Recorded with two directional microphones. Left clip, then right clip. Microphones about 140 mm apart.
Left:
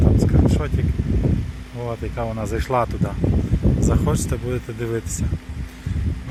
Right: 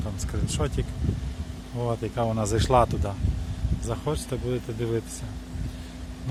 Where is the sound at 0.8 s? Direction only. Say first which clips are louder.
Left 8 dB; 20° right (ahead or behind).